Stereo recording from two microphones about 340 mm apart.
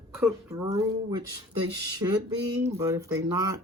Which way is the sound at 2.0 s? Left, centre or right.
Centre.